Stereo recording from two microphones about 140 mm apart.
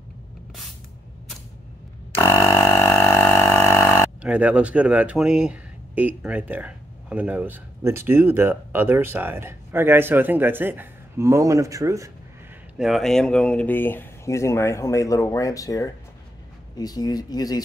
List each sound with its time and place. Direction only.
2.1 s a sound: 20° left (ahead or behind)
4.2 s speech: 10° right (ahead or behind)
12.7 s speech: centre (ahead or behind); by 17.6 s 30° left (ahead or behind)